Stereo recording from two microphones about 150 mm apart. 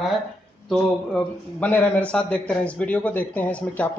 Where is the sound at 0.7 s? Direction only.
10° left (ahead or behind).